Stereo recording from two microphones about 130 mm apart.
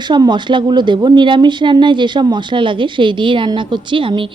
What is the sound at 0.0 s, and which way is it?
A woman's voice, 35° right (ahead or behind).